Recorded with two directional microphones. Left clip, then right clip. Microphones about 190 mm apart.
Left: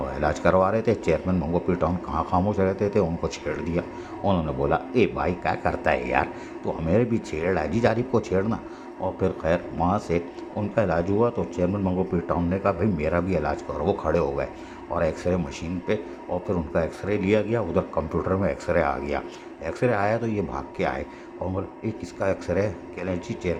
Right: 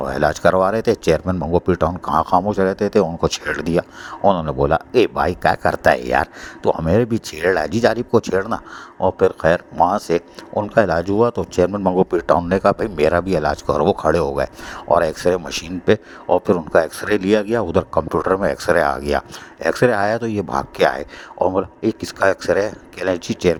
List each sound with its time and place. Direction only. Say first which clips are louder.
0.0 s a man's voice: right 7 dB; 45° right (ahead or behind)